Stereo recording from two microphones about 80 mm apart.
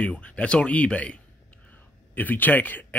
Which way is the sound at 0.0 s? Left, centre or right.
Centre.